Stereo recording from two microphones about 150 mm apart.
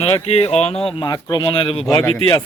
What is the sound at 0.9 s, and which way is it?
Speech, 30° left (ahead or behind).